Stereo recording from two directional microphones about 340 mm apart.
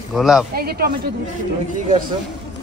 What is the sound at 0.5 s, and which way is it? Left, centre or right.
Speech, right.